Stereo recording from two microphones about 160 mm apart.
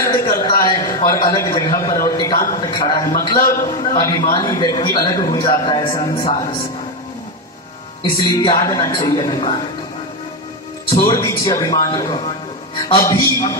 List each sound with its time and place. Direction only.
0.4 s a man's voice: 25° left (ahead or behind)
3.3 s a man's voice: 55° left (ahead or behind)
3.9 s a man's voice: 25° left (ahead or behind)
8.0 s a man's voice: 25° left (ahead or behind)
11.0 s a man's voice: 20° left (ahead or behind)